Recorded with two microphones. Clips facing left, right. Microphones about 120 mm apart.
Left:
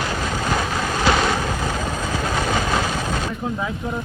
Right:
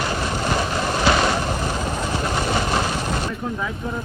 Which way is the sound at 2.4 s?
45° left (ahead or behind).